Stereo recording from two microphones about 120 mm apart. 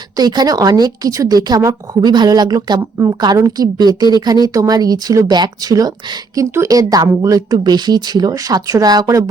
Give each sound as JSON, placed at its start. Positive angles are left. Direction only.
{"t": 0.2, "sound": "speech", "side_deg": -35}